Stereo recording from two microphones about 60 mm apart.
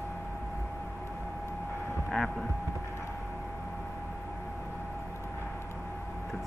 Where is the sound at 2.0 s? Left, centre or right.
Centre.